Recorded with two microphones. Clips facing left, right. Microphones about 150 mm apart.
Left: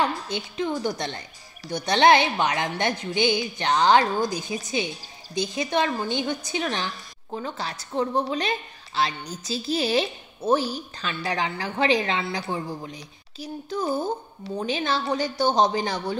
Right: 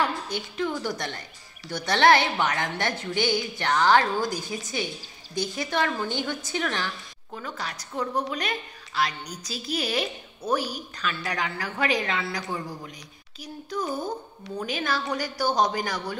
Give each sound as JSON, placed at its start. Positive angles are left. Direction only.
{"t": 0.0, "sound": "a woman's voice", "side_deg": 20}